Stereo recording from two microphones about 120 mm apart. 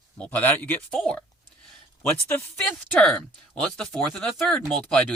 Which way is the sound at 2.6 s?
10° left (ahead or behind).